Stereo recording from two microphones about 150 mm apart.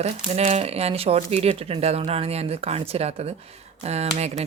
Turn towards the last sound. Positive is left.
turn(degrees=-45)  # may be behind; listen again after turning